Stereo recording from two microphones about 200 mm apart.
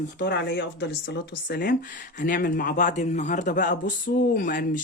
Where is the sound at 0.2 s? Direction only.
55° left (ahead or behind).